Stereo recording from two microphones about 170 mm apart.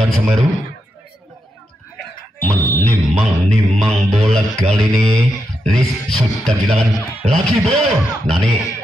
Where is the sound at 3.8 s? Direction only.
Centre (ahead or behind).